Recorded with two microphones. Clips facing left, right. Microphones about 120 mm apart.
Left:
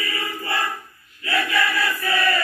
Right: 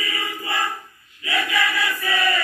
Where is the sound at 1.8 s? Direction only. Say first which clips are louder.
Left 1 dB; 15° right (ahead or behind).